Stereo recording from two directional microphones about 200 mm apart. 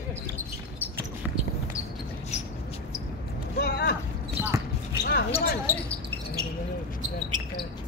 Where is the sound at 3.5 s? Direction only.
55° left (ahead or behind).